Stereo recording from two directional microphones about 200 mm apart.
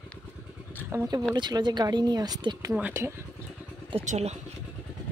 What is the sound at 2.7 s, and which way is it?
Speech, 10° right (ahead or behind).